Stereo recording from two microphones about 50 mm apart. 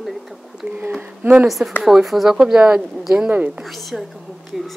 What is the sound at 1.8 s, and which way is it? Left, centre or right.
Speech, centre.